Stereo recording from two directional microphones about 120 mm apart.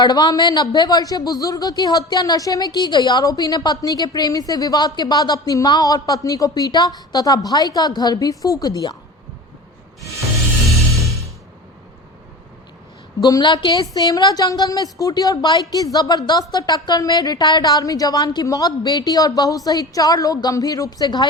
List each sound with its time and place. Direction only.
0.0 s a man's voice: 35° left (ahead or behind)
13.2 s a man's voice: 35° left (ahead or behind)